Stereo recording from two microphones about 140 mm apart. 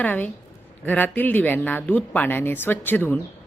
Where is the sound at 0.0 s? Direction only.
10° left (ahead or behind).